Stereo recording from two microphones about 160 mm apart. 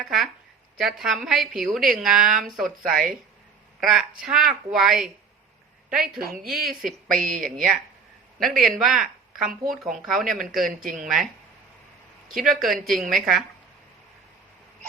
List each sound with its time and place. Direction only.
0.0 s a woman's voice: centre (ahead or behind)
2.9 s a woman's voice: 60° right (ahead or behind)
3.8 s a woman's voice: centre (ahead or behind)
6.2 s a woman's voice: 65° right (ahead or behind)
8.6 s a woman's voice: centre (ahead or behind)
10.9 s a woman's voice: 55° right (ahead or behind)
12.4 s a woman's voice: centre (ahead or behind)